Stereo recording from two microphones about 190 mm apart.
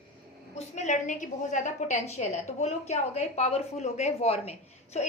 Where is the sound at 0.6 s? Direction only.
35° left (ahead or behind).